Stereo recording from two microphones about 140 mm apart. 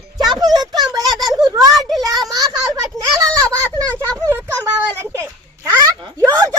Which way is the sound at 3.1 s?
25° right (ahead or behind).